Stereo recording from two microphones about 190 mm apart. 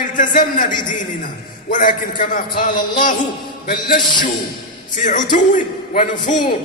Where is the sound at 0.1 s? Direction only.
45° left (ahead or behind).